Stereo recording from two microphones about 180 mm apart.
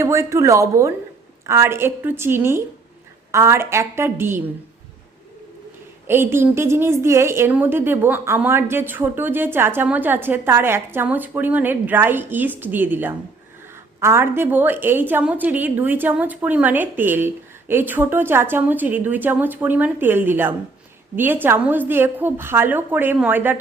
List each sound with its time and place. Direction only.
0.0 s a woman's voice: 15° right (ahead or behind)
6.1 s a woman's voice: 10° right (ahead or behind)